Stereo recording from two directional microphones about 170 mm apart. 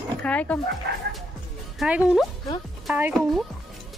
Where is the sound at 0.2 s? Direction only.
10° left (ahead or behind).